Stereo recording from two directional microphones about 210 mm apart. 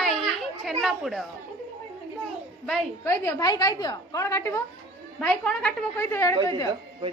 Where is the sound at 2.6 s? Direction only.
10° left (ahead or behind).